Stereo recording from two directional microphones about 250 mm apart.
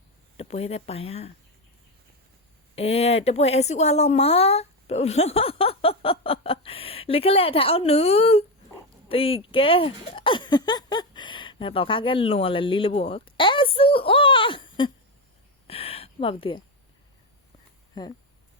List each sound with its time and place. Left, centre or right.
0.3 s speech: left
2.7 s speech: left
15.6 s a sound: left
18.0 s speech: centre